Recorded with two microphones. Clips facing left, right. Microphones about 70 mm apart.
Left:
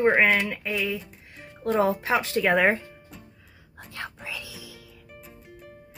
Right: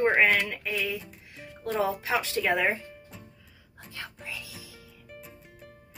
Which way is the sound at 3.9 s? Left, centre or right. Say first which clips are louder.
Left 5 dB; left.